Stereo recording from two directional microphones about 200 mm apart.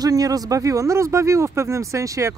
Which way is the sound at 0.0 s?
20° right (ahead or behind).